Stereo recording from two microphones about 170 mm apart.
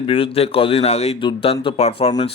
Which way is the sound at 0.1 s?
35° left (ahead or behind).